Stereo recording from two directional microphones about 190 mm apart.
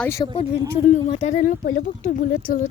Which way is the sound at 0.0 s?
15° left (ahead or behind).